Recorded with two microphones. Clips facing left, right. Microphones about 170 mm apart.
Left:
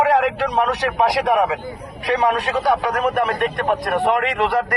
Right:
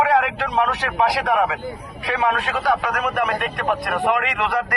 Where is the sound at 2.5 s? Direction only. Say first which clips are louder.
Left 2 dB; 25° left (ahead or behind).